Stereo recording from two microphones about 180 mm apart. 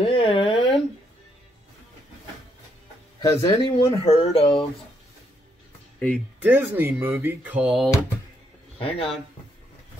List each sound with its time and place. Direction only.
0.0 s a sound: 30° left (ahead or behind)
3.2 s speech: 20° left (ahead or behind)
4.0 s speech: 30° left (ahead or behind)
5.9 s speech: 5° left (ahead or behind)
6.4 s speech: 10° right (ahead or behind)
8.7 s speech: 30° left (ahead or behind)